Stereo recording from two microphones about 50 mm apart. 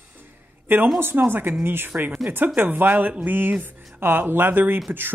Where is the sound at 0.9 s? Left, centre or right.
Right.